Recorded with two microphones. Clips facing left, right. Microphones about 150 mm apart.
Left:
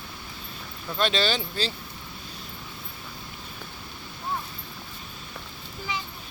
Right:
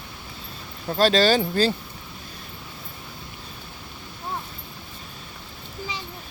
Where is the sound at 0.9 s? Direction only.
40° right (ahead or behind).